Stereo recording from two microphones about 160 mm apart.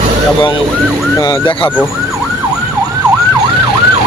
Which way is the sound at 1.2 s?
25° left (ahead or behind).